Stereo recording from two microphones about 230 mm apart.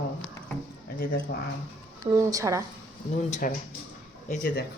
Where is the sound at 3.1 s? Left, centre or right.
Left.